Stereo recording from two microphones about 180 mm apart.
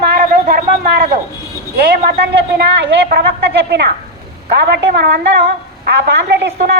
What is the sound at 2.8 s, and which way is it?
A woman's voice, 70° right (ahead or behind).